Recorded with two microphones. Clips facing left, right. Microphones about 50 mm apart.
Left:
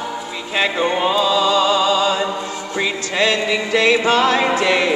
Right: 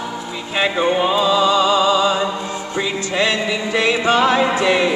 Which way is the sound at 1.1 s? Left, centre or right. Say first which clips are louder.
Even; right.